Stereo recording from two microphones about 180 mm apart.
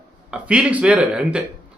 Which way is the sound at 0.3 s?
5° right (ahead or behind).